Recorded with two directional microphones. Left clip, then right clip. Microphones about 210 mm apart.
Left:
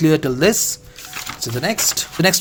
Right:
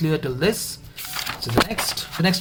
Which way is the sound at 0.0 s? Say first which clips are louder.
Left 7 dB; 40° left (ahead or behind).